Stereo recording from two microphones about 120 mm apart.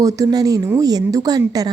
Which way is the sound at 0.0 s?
30° right (ahead or behind).